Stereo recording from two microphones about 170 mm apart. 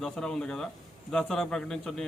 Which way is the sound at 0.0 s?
5° left (ahead or behind).